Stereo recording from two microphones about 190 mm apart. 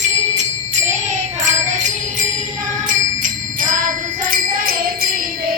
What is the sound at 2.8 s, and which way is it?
Jingle bell, 45° right (ahead or behind).